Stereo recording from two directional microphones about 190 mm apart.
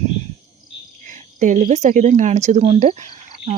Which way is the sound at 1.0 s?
40° right (ahead or behind).